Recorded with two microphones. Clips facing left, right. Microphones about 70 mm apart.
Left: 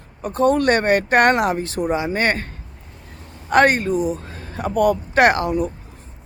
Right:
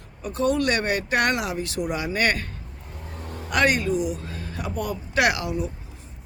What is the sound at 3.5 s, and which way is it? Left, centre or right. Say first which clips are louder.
Speech: left 6 dB; left.